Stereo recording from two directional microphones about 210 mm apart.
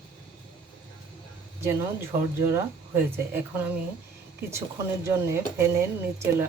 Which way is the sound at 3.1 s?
10° right (ahead or behind).